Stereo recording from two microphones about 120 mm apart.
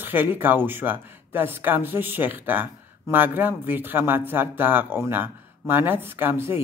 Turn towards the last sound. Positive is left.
turn(degrees=-20)  # may be behind; listen again after turning